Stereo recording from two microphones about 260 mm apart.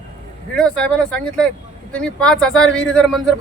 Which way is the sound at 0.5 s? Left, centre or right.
Centre.